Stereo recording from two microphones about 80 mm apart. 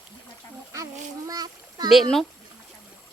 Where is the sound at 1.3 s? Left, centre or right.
Right.